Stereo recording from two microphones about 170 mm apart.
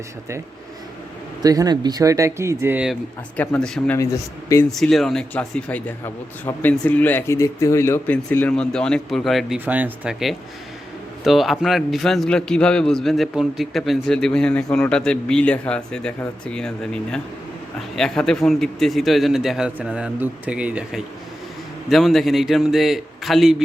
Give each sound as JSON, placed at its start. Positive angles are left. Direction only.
{"t": 1.4, "sound": "speech", "side_deg": -20}
{"t": 3.3, "sound": "speech", "side_deg": 10}
{"t": 4.7, "sound": "a man's voice", "side_deg": 0}